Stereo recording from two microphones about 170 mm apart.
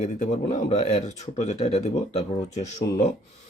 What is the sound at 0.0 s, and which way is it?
Speech, 40° left (ahead or behind).